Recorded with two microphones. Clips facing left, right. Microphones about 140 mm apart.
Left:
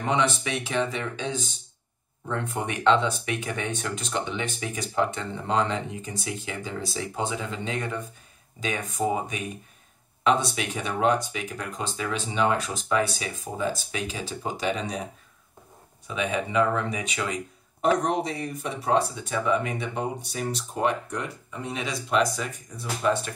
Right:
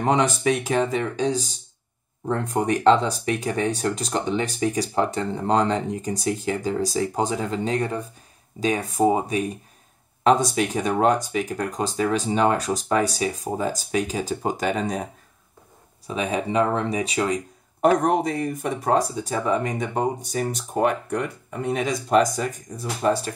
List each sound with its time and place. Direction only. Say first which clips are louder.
0.0 s speech: right 5 dB; 45° right (ahead or behind)
16.1 s speech: right 3 dB; 35° right (ahead or behind)
17.8 s speech: right 5 dB; 55° right (ahead or behind)